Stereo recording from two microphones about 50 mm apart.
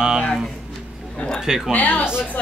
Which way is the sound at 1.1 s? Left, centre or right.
Centre.